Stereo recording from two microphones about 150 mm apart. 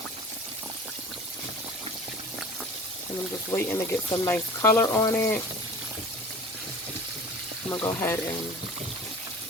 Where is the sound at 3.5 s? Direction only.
15° left (ahead or behind).